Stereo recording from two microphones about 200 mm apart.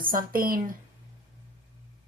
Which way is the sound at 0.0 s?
45° right (ahead or behind).